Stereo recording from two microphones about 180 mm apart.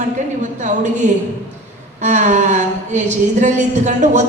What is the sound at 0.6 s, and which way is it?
A woman's voice, 40° right (ahead or behind).